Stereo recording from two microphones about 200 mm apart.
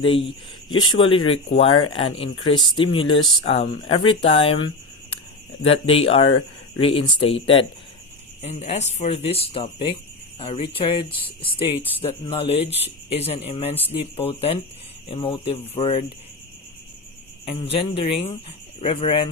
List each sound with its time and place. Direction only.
0.3 s speech: 25° left (ahead or behind)
17.4 s speech: 30° left (ahead or behind)